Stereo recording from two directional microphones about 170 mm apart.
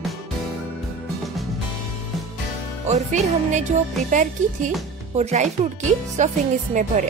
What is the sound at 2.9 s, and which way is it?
Speech, 40° right (ahead or behind).